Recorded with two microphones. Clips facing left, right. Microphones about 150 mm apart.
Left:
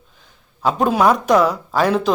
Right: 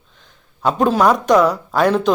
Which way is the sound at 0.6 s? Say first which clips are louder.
Right 1 dB; centre (ahead or behind).